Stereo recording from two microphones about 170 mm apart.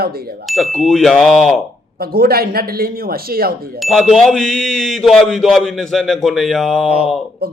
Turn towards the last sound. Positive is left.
turn(degrees=0)  # may be behind; listen again after turning